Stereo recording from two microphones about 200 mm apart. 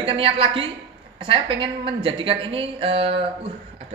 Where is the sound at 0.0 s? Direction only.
30° right (ahead or behind).